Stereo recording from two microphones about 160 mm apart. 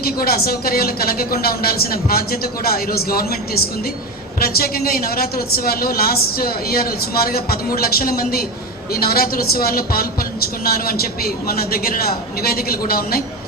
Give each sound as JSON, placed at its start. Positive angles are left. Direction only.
{"t": 0.0, "sound": "a woman's voice", "side_deg": 70}